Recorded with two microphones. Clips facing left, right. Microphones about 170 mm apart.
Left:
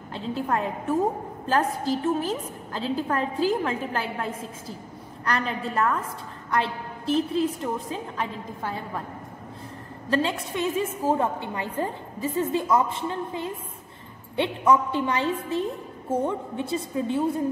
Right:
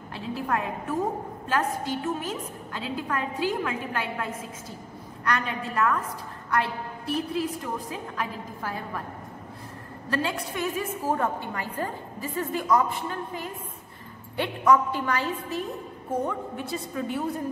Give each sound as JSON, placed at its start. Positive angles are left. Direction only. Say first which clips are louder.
{"t": 0.3, "sound": "a woman's voice", "louder": "left 2 dB", "side_deg": 25}
{"t": 10.2, "sound": "a woman's voice", "louder": "left 2 dB", "side_deg": 25}